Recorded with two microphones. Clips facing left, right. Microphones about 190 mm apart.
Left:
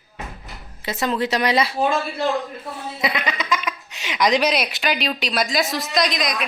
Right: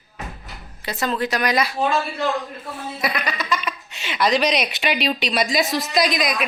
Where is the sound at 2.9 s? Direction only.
20° left (ahead or behind).